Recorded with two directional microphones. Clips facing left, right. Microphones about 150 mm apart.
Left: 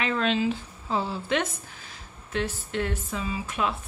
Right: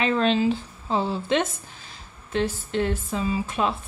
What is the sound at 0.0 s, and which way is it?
Speech, 30° right (ahead or behind).